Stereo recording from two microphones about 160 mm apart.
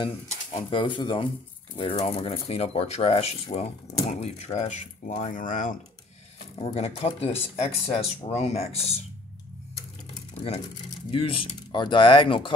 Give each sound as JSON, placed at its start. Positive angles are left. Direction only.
{"t": 0.0, "sound": "speech", "side_deg": 35}
{"t": 6.6, "sound": "speech", "side_deg": 40}
{"t": 11.1, "sound": "speech", "side_deg": 35}